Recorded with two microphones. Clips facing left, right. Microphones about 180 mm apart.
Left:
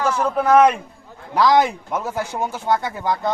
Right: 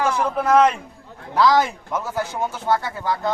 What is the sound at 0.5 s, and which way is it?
Speech, 5° left (ahead or behind).